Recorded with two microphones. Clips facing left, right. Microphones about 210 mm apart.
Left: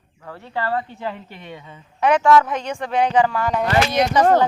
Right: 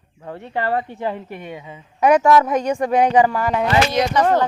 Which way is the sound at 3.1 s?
10° right (ahead or behind).